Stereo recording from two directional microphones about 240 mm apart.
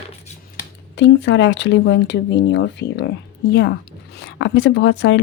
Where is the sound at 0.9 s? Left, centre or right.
Left.